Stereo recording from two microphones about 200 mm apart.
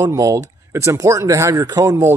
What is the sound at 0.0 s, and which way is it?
Speech, 15° right (ahead or behind).